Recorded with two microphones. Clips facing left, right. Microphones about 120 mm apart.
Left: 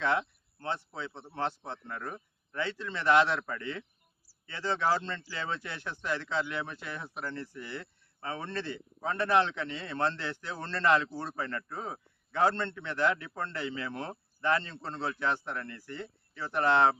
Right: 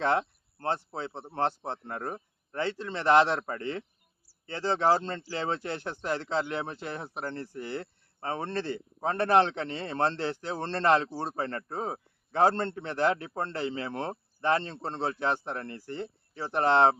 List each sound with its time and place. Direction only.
0.0 s speech: 40° right (ahead or behind)